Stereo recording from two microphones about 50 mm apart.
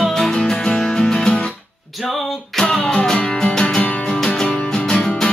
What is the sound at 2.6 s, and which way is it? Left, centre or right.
Music, centre.